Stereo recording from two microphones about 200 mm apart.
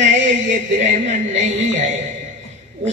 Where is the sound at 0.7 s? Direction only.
35° right (ahead or behind).